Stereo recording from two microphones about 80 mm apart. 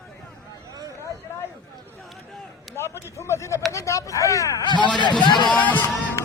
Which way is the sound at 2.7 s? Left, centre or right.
Left.